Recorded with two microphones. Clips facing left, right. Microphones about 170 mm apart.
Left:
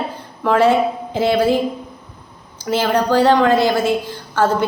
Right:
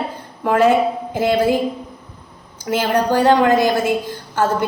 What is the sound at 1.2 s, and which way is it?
Speech, 15° right (ahead or behind).